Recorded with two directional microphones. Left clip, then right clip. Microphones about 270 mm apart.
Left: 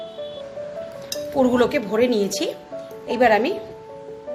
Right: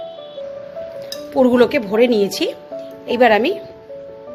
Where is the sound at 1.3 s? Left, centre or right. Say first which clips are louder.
Right 5 dB; right.